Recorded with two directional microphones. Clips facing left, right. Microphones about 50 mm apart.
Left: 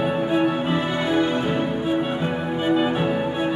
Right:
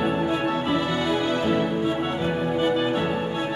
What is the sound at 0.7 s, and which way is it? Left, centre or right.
Music, left.